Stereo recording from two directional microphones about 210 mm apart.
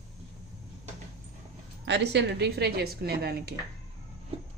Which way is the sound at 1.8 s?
55° right (ahead or behind).